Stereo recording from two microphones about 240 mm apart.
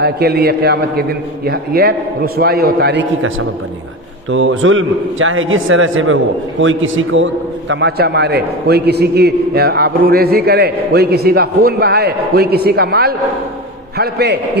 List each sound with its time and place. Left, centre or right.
0.0 s a man's voice: right
7.7 s a man's voice: right